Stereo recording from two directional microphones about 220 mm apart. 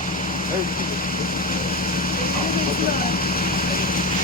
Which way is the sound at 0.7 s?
40° left (ahead or behind).